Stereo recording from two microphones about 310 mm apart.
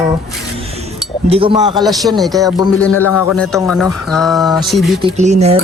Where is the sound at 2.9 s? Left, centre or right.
Left.